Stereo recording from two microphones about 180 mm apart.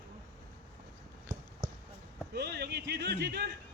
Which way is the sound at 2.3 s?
65° right (ahead or behind).